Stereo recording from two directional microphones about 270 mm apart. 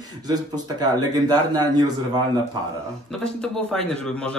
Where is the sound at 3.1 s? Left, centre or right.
Centre.